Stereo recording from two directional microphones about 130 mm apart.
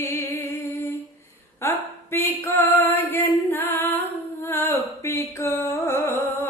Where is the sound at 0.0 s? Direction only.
20° left (ahead or behind).